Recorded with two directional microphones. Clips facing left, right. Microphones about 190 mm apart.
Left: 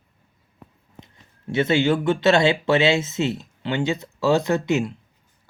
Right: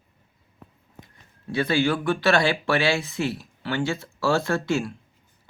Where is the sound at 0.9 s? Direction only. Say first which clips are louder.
Left 2 dB; 20° left (ahead or behind).